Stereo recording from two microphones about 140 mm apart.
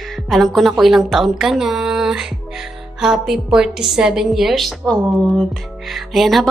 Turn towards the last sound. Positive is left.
turn(degrees=0)  # may be behind; listen again after turning